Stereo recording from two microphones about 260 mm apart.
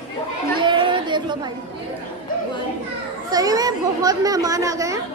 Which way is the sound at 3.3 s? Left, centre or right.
Centre.